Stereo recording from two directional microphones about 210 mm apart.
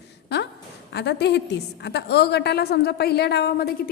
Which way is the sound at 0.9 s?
55° left (ahead or behind).